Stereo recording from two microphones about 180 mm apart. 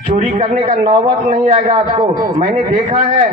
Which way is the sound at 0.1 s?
35° right (ahead or behind).